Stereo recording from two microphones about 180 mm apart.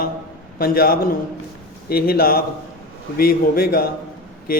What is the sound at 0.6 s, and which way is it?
A man's voice, 55° left (ahead or behind).